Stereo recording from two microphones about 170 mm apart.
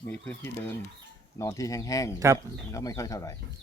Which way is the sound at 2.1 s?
20° right (ahead or behind).